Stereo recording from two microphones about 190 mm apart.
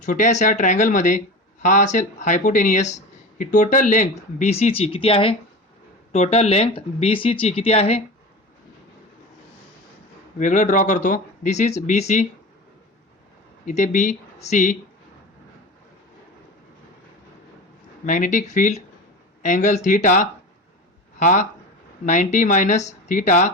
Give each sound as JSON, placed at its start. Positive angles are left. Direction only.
{"t": 0.0, "sound": "speech", "side_deg": 40}
{"t": 10.3, "sound": "speech", "side_deg": 40}
{"t": 13.7, "sound": "speech", "side_deg": 40}
{"t": 18.0, "sound": "speech", "side_deg": 45}